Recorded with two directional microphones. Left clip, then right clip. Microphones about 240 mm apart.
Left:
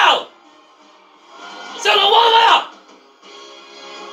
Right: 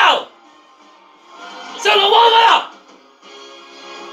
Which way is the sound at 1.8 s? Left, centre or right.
Centre.